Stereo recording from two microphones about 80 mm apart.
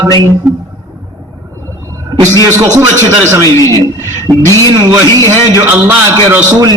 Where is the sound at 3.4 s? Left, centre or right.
Left.